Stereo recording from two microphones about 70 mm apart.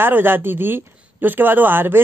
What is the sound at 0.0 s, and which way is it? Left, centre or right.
Speech, right.